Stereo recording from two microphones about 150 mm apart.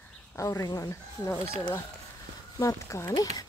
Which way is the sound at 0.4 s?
20° left (ahead or behind).